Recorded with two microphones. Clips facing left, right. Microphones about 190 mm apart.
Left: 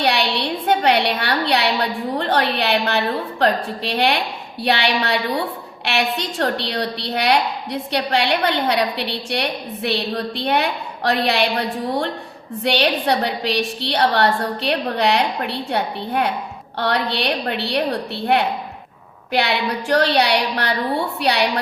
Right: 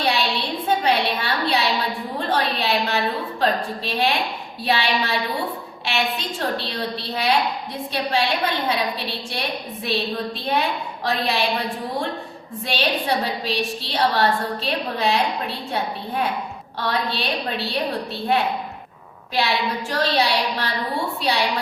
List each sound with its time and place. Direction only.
0.0 s a sound: 70° left (ahead or behind)
2.1 s a woman's voice: 65° left (ahead or behind)
12.6 s a woman's voice: 70° left (ahead or behind)